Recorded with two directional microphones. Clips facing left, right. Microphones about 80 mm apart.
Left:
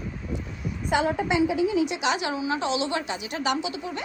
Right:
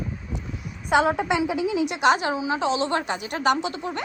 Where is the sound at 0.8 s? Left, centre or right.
Right.